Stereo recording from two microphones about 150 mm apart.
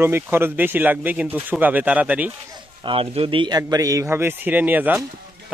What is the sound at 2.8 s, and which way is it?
A man's voice, 40° right (ahead or behind).